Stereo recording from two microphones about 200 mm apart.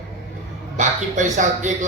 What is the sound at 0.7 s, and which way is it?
Speech, 35° right (ahead or behind).